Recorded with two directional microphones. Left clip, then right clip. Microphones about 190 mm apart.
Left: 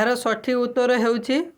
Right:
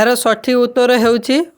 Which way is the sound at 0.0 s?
30° right (ahead or behind).